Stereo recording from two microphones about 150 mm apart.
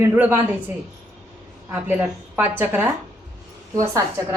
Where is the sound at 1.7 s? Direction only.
10° right (ahead or behind).